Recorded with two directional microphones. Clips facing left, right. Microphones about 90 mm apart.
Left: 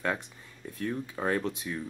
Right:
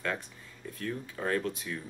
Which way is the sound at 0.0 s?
20° left (ahead or behind).